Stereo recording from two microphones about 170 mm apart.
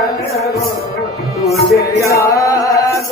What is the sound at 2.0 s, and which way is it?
Chant, 15° left (ahead or behind).